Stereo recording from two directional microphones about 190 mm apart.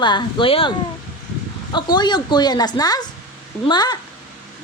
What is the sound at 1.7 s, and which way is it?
Speech, 25° left (ahead or behind).